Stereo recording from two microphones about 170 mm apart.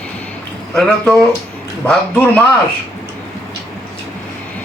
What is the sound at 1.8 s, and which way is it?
Speech, 10° left (ahead or behind).